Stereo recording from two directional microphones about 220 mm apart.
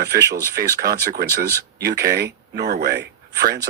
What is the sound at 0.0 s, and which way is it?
Speech, 45° right (ahead or behind).